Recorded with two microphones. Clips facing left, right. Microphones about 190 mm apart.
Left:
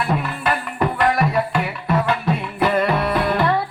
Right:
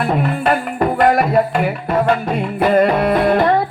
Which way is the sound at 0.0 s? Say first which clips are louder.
Right 5 dB; 50° right (ahead or behind).